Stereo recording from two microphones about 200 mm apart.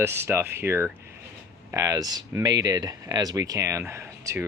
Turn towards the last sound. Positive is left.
turn(degrees=-15)  # may be behind; listen again after turning